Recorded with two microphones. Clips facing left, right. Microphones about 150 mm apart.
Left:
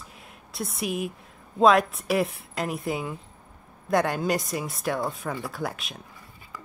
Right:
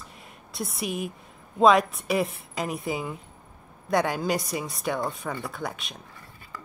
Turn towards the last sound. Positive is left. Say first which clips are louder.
# left 2 dB
turn(degrees=0)  # may be behind; listen again after turning